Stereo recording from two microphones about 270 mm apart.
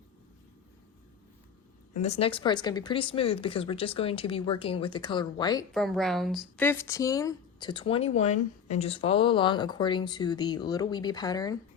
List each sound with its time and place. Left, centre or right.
2.0 s speech: left
5.7 s speech: centre